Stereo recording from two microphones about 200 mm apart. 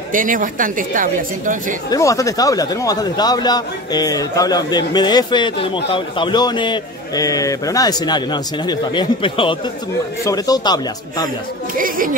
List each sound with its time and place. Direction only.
0.1 s a woman's voice: 40° right (ahead or behind)
1.9 s speech: 15° left (ahead or behind)
11.7 s speech: 45° right (ahead or behind)